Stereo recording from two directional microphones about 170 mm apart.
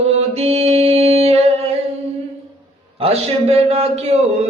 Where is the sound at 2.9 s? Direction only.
35° right (ahead or behind).